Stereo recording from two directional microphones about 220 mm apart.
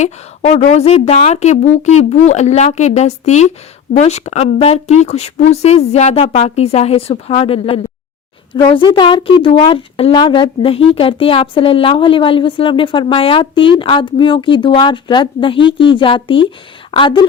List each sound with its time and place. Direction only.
0.0 s a woman's voice: 30° left (ahead or behind)